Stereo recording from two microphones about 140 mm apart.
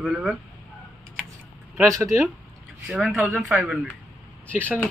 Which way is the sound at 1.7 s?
20° right (ahead or behind).